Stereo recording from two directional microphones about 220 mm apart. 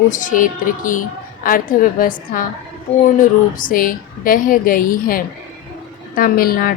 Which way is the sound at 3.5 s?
40° left (ahead or behind).